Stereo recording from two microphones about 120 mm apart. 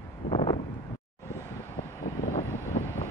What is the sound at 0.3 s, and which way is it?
Wind noise, 40° left (ahead or behind).